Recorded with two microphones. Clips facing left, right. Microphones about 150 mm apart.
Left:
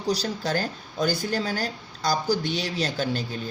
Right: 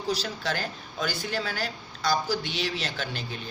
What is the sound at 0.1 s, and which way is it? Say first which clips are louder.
A woman's voice: left 4 dB; 40° left (ahead or behind).